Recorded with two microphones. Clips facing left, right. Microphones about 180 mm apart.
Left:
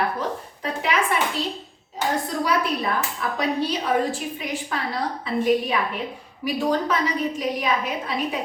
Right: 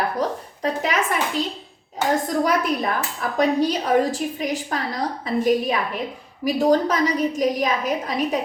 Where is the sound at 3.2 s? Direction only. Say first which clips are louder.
Right 8 dB; 45° right (ahead or behind).